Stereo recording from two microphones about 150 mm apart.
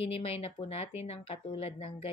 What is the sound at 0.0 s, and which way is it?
Speech, 40° left (ahead or behind).